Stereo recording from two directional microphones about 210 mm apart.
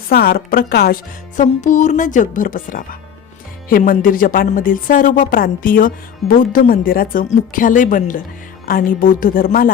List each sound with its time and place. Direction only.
0.1 s a woman's voice: 45° left (ahead or behind)
1.4 s speech: 35° left (ahead or behind)